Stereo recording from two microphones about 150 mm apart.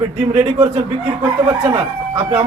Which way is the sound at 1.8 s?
40° right (ahead or behind).